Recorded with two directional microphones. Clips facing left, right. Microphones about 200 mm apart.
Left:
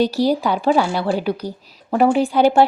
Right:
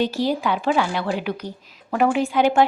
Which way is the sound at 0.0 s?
40° left (ahead or behind).